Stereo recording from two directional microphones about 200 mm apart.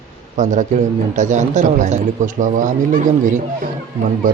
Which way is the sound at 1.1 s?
40° right (ahead or behind).